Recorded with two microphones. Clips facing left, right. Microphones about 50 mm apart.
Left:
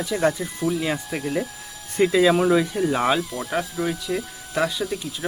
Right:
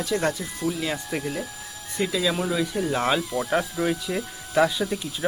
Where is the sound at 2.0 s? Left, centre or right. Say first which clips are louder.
Left 7 dB; left.